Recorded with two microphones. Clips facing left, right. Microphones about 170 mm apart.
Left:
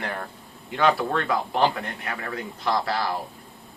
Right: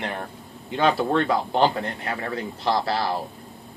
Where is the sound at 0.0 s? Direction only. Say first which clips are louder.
Right 1 dB; 20° right (ahead or behind).